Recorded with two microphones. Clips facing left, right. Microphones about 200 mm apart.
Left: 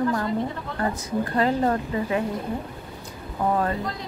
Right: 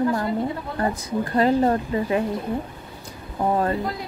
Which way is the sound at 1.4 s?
30° right (ahead or behind).